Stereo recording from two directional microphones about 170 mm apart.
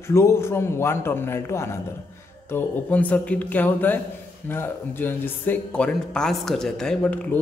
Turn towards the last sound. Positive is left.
turn(degrees=10)  # may be behind; listen again after turning